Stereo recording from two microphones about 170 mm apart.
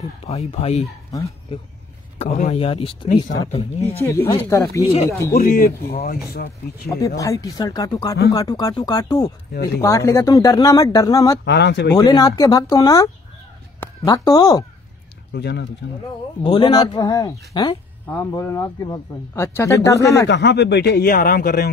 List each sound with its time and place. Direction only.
0.3 s speech: 35° left (ahead or behind)
2.1 s speech: 45° left (ahead or behind)
2.5 s speech: 30° left (ahead or behind)
4.0 s speech: 15° left (ahead or behind)
5.3 s speech: 60° left (ahead or behind)
7.2 s speech: 20° left (ahead or behind)
11.4 s speech: 90° left
11.9 s speech: 20° left (ahead or behind)
15.3 s speech: 75° left (ahead or behind)
16.4 s speech: 30° left (ahead or behind)
20.2 s speech: 90° left; by 21.6 s 60° left (ahead or behind)